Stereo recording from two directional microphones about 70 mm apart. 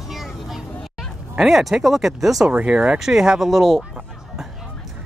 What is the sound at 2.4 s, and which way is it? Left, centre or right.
Speech, centre.